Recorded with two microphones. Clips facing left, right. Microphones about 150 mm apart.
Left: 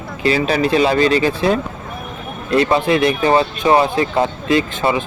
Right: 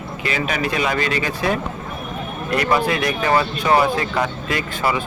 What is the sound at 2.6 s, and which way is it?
Speech, 25° left (ahead or behind).